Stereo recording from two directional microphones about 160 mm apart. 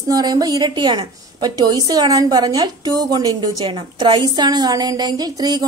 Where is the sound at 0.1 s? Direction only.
25° right (ahead or behind).